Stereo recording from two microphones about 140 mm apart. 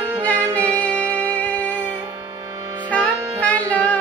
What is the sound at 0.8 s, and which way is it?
Music, 10° left (ahead or behind).